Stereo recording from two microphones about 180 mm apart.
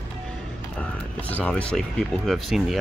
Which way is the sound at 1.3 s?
10° left (ahead or behind).